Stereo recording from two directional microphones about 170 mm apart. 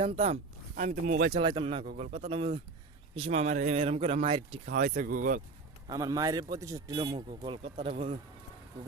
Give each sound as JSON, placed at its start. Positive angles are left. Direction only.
{"t": 0.0, "sound": "speech", "side_deg": -35}
{"t": 0.8, "sound": "speech", "side_deg": -50}
{"t": 1.3, "sound": "speech", "side_deg": -30}
{"t": 4.6, "sound": "speech", "side_deg": -50}
{"t": 5.9, "sound": "speech", "side_deg": -20}